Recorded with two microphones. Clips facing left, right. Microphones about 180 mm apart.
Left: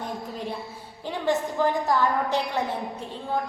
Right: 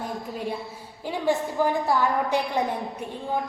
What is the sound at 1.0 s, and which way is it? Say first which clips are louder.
A woman's voice: right 1 dB; 10° right (ahead or behind).